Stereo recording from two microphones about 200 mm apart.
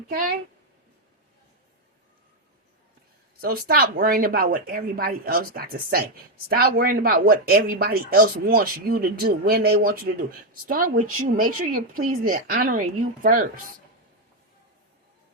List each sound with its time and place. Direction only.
0.1 s speech: 45° right (ahead or behind)
3.4 s speech: 45° right (ahead or behind)